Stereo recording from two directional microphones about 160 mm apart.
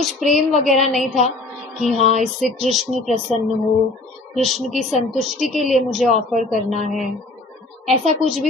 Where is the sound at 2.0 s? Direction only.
45° right (ahead or behind).